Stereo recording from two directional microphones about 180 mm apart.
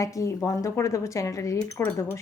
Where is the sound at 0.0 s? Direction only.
15° left (ahead or behind).